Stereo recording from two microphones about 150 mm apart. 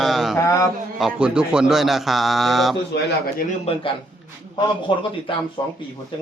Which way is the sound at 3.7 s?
40° left (ahead or behind).